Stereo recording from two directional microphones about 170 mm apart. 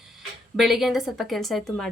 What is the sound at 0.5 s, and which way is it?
A woman's voice, centre (ahead or behind).